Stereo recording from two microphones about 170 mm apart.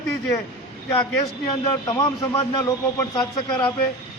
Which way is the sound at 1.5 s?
25° left (ahead or behind).